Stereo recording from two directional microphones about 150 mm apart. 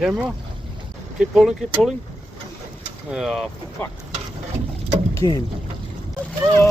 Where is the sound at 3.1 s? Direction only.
Centre (ahead or behind).